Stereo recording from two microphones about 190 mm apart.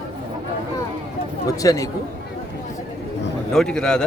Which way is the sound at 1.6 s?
20° left (ahead or behind).